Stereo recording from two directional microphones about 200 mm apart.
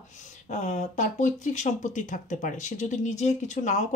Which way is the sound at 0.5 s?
35° left (ahead or behind).